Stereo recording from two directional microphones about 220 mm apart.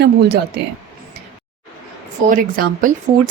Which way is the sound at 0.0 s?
50° right (ahead or behind).